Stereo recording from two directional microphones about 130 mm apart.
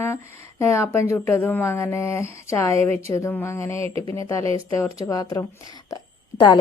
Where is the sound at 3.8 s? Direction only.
50° right (ahead or behind).